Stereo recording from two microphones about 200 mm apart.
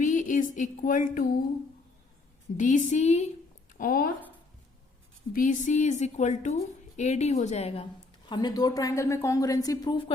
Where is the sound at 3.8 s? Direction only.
45° left (ahead or behind).